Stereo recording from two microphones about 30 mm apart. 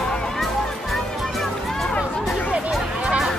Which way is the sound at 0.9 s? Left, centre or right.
Centre.